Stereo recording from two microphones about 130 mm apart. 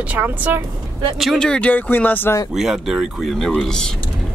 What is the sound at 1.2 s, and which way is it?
Speech, 5° left (ahead or behind).